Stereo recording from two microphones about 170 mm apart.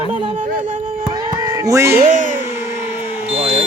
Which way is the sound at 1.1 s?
25° right (ahead or behind).